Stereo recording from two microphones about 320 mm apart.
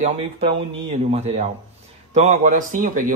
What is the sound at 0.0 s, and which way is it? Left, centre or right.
Speech, centre.